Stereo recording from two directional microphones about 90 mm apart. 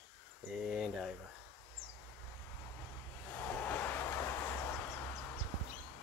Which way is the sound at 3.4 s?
20° left (ahead or behind).